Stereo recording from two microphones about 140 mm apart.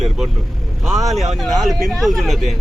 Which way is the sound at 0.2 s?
Centre (ahead or behind).